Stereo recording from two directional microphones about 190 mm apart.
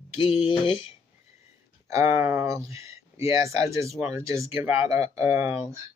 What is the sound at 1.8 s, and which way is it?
Speech, 15° right (ahead or behind).